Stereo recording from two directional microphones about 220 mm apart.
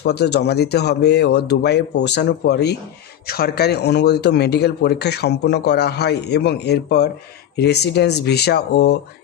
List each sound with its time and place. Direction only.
0.0 s speech: 50° left (ahead or behind)